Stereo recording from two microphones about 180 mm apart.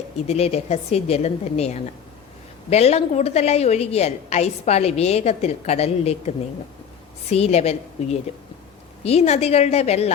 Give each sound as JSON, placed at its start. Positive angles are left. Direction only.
{"t": 0.3, "sound": "a woman's voice", "side_deg": 35}